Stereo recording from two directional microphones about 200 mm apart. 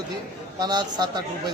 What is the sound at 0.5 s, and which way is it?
Speech, 20° right (ahead or behind).